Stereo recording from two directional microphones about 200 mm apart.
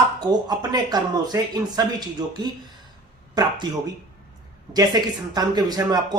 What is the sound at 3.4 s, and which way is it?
Speech, 20° right (ahead or behind).